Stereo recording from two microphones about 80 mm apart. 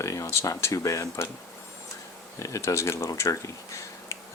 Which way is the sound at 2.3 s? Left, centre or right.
Left.